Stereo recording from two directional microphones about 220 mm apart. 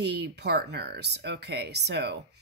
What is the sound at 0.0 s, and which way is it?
Speech, 50° right (ahead or behind).